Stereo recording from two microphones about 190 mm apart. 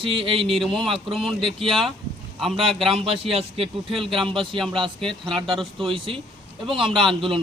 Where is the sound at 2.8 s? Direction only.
30° right (ahead or behind).